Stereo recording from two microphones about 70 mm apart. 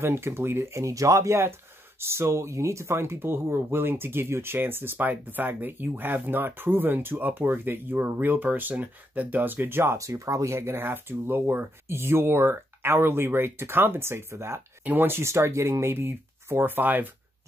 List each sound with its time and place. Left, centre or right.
0.0 s speech: right
9.9 s speech: right
14.8 s speech: right